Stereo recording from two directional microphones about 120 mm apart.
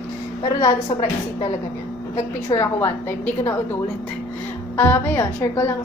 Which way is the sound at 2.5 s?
30° left (ahead or behind).